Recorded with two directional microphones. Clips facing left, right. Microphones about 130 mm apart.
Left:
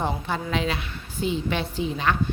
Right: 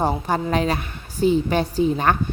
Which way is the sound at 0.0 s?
40° right (ahead or behind).